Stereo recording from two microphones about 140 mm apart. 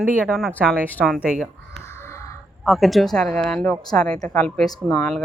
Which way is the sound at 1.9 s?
20° left (ahead or behind).